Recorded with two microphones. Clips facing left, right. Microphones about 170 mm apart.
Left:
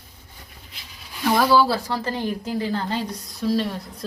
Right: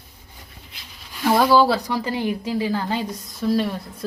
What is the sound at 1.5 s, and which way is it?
A woman's voice, 20° right (ahead or behind).